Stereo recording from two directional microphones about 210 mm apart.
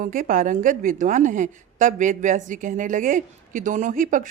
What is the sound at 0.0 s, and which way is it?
A woman's voice, 40° right (ahead or behind).